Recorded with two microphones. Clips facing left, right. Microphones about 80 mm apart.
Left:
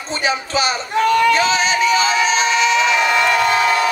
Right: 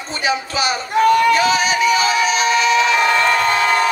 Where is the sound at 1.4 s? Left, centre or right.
Left.